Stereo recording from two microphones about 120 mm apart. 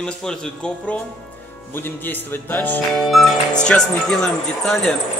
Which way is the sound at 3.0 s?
Centre (ahead or behind).